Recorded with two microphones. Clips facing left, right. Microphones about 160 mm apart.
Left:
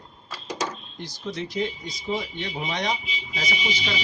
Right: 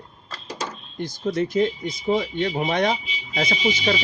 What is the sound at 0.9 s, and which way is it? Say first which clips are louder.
Speech: right 10 dB; 50° right (ahead or behind).